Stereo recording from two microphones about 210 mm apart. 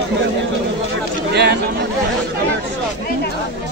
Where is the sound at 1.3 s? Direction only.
50° right (ahead or behind).